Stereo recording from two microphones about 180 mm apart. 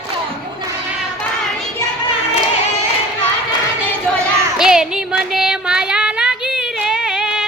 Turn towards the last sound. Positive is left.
turn(degrees=-5)  # may be behind; listen again after turning